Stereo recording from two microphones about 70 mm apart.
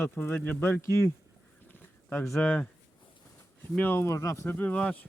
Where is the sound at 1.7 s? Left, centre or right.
Left.